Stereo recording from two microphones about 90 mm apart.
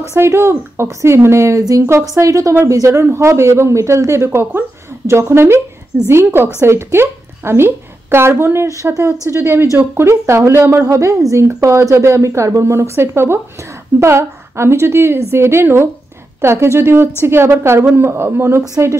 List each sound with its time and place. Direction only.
0.1 s a woman's voice: 30° right (ahead or behind)